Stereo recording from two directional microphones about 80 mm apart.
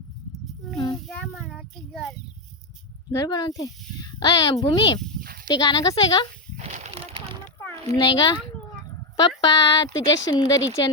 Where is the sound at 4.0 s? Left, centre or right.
Left.